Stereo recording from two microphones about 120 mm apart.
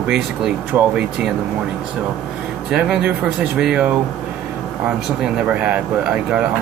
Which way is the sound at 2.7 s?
5° right (ahead or behind).